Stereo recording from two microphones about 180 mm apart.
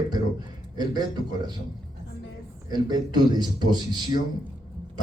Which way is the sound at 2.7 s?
25° right (ahead or behind).